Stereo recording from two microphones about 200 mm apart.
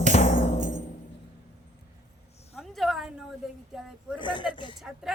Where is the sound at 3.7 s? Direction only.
Centre (ahead or behind).